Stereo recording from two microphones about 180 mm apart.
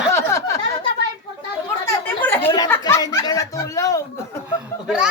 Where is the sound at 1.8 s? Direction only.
10° left (ahead or behind).